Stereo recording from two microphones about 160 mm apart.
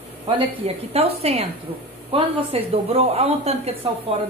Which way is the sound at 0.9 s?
40° right (ahead or behind).